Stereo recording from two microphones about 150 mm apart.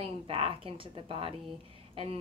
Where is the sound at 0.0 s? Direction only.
40° right (ahead or behind).